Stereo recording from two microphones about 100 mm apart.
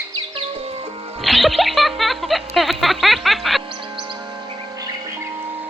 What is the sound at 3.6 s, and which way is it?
Music, 55° right (ahead or behind).